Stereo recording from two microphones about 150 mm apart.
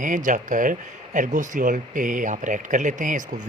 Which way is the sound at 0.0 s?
60° right (ahead or behind).